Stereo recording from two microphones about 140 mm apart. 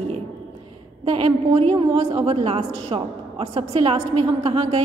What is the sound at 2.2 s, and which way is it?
A woman's voice, 45° right (ahead or behind).